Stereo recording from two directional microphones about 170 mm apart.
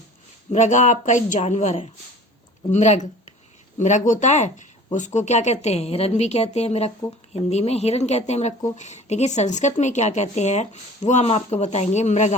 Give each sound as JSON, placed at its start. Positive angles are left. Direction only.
{"t": 0.5, "sound": "speech", "side_deg": 45}